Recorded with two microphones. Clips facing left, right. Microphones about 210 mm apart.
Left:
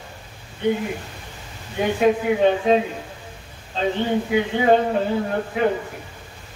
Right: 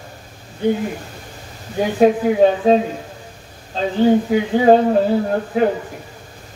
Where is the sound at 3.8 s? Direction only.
40° right (ahead or behind).